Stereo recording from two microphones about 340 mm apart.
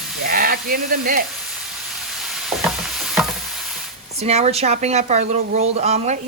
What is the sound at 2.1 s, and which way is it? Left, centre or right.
Stir, centre.